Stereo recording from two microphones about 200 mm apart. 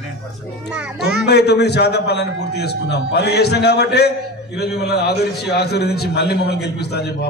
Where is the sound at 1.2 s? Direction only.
55° left (ahead or behind).